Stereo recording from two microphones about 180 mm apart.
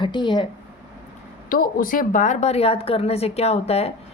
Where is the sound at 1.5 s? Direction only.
50° left (ahead or behind).